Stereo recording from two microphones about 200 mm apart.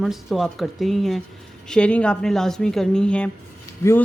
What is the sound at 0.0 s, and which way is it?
A woman's voice, centre (ahead or behind).